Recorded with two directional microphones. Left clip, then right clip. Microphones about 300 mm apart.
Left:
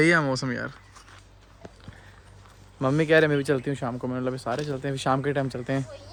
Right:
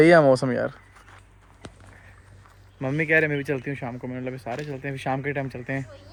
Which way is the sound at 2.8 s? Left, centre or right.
Centre.